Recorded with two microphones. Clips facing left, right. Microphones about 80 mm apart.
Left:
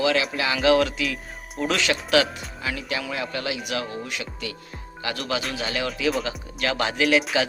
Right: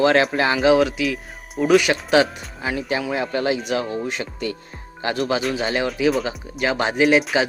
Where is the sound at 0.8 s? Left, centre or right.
Centre.